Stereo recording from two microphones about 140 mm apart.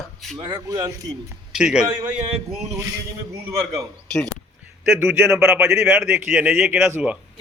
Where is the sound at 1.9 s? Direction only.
25° right (ahead or behind).